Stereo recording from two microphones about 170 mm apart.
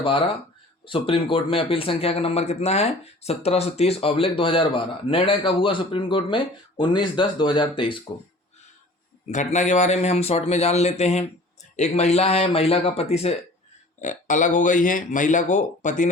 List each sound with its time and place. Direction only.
0.9 s a man's voice: 30° left (ahead or behind)
9.2 s a man's voice: 45° left (ahead or behind)
14.0 s speech: 50° left (ahead or behind)